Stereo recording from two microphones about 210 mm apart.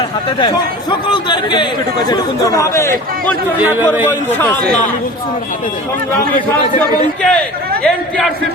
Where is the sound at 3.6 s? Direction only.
10° right (ahead or behind).